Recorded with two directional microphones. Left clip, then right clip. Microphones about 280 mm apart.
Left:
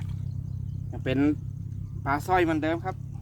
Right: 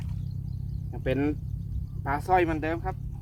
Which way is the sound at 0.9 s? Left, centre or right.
Left.